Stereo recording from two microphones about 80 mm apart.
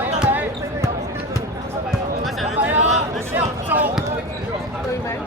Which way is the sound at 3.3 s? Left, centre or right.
Right.